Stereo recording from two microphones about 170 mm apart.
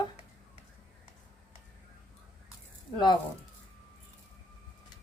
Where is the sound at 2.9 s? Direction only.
25° left (ahead or behind).